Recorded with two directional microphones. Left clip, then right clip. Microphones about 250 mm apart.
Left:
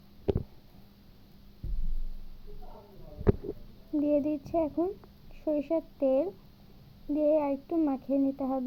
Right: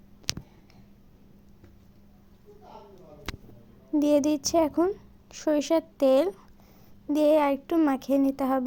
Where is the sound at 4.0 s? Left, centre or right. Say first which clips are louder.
Right 5 dB; right.